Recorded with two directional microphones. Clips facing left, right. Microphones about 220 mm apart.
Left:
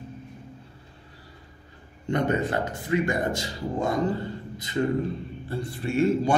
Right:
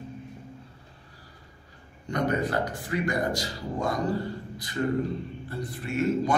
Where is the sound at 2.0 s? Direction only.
25° left (ahead or behind).